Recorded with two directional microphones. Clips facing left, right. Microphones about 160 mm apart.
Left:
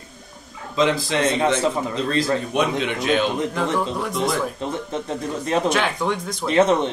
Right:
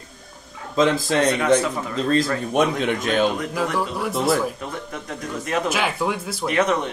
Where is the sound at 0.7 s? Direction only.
45° right (ahead or behind).